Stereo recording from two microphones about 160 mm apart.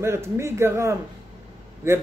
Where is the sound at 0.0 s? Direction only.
15° right (ahead or behind).